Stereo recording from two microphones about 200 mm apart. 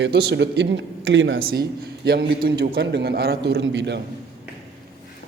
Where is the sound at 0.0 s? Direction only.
55° right (ahead or behind).